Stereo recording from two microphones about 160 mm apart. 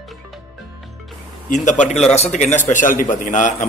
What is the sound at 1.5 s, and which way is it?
A man's voice, 50° left (ahead or behind).